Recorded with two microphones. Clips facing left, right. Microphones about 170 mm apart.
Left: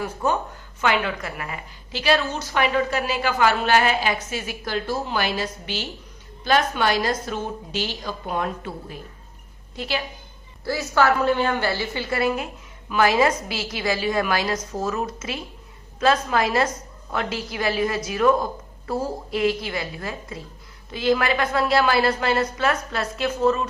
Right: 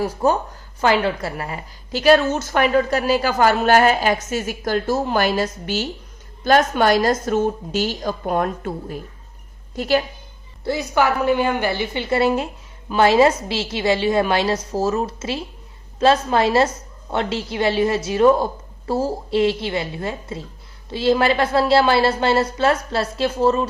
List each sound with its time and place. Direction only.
0.0 s a woman's voice: 35° right (ahead or behind)
10.6 s a woman's voice: 20° right (ahead or behind)